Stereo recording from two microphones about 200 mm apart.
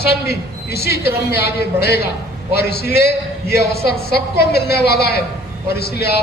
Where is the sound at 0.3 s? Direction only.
55° left (ahead or behind).